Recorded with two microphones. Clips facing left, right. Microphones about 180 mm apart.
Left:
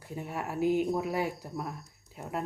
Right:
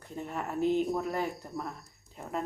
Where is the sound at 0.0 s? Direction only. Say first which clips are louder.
Even; 10° left (ahead or behind).